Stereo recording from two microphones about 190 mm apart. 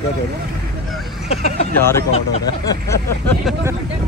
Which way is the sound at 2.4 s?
20° left (ahead or behind).